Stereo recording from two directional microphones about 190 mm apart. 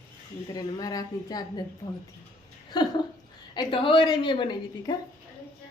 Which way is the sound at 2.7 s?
20° left (ahead or behind).